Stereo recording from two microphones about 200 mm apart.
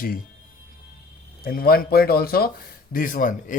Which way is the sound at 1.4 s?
50° left (ahead or behind).